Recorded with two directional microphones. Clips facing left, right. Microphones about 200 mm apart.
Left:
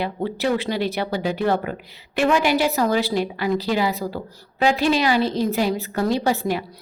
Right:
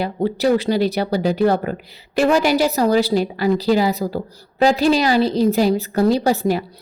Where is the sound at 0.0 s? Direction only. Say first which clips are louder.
Right 5 dB; 40° right (ahead or behind).